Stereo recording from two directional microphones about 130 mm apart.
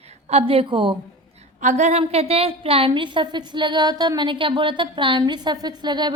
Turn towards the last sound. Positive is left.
turn(degrees=-35)  # may be behind; listen again after turning